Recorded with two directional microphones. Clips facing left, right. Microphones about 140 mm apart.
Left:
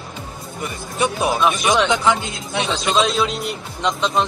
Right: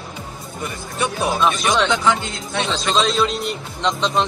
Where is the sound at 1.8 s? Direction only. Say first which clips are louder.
Left 1 dB; 20° left (ahead or behind).